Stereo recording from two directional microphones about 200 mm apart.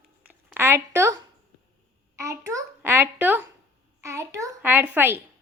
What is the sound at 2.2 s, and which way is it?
A child's voice, 15° right (ahead or behind).